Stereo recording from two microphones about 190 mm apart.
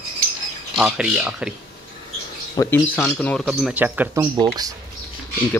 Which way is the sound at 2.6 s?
10° left (ahead or behind).